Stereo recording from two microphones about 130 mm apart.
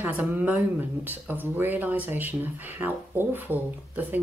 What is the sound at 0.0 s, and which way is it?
Speech, 10° right (ahead or behind).